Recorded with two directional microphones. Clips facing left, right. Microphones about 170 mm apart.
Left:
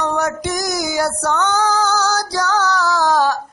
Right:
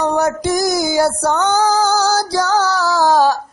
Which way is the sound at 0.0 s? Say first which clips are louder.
Right 4 dB; 35° right (ahead or behind).